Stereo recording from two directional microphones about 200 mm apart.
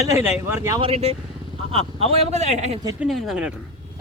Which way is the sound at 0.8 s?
30° right (ahead or behind).